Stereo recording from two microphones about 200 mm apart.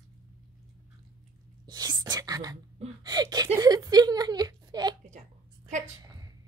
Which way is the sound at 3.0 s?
20° right (ahead or behind).